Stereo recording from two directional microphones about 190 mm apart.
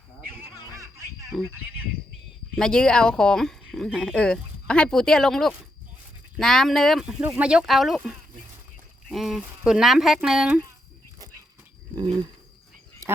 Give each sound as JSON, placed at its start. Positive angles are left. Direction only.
{"t": 0.7, "sound": "a sound", "side_deg": -15}
{"t": 1.6, "sound": "speech", "side_deg": -10}
{"t": 2.6, "sound": "speech", "side_deg": 5}
{"t": 11.9, "sound": "speech", "side_deg": -20}
{"t": 13.0, "sound": "duck", "side_deg": -20}